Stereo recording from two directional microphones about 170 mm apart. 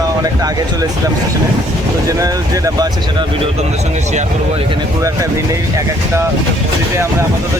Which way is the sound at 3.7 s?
45° right (ahead or behind).